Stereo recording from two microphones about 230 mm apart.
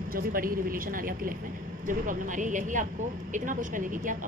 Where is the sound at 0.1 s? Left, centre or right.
Right.